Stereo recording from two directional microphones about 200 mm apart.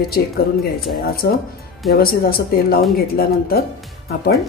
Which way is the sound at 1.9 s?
50° left (ahead or behind).